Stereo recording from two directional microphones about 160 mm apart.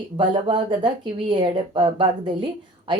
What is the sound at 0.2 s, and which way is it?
Speech, 30° right (ahead or behind).